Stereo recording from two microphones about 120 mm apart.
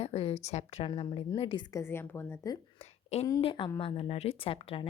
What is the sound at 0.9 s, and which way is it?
Speech, 45° left (ahead or behind).